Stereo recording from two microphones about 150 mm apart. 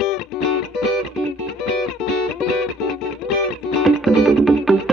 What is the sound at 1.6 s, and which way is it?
Music, centre (ahead or behind).